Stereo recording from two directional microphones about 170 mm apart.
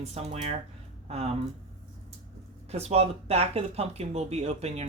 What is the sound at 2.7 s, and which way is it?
Speech, 40° right (ahead or behind).